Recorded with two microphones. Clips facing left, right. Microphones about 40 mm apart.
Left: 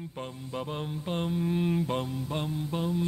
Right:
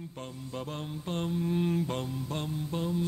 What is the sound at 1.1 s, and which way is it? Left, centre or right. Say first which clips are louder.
Mantra: left 1 dB; centre.